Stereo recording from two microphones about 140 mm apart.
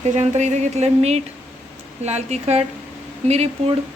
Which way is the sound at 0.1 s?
55° right (ahead or behind).